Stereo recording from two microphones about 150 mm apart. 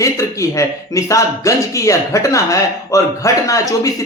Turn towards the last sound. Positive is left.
turn(degrees=20)  # may be behind; listen again after turning